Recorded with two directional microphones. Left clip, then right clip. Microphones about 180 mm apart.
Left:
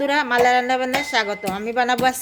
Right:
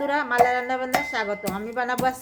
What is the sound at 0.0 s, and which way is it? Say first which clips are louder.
A woman's voice: left 3 dB; 35° left (ahead or behind).